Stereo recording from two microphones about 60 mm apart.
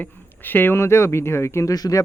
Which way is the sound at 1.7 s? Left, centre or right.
Left.